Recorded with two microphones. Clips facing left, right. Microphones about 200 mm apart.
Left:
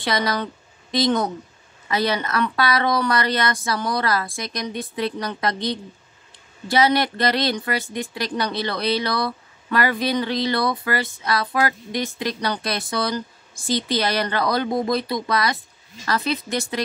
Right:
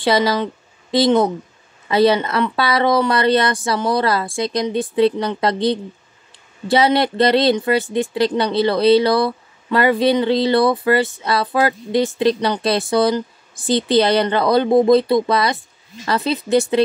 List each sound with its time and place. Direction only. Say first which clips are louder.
0.0 s speech: right 7 dB; 25° right (ahead or behind)